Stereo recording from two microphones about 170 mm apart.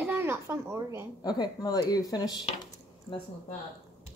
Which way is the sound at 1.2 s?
25° left (ahead or behind).